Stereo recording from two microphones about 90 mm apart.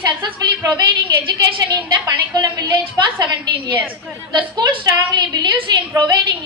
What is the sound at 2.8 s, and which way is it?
Speech, 60° right (ahead or behind).